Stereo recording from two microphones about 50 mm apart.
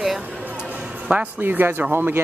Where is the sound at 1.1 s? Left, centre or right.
Right.